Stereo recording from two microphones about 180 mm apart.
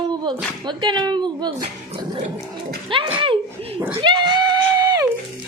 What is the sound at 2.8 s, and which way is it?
A woman's voice, 30° right (ahead or behind).